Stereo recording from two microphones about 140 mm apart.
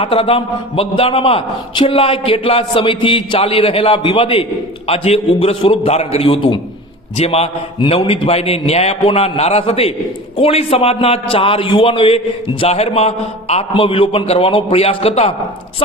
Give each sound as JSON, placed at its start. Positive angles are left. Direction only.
{"t": 0.0, "sound": "a man's voice", "side_deg": 40}